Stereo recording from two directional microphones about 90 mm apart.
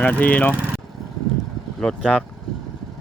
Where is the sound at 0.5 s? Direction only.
20° right (ahead or behind).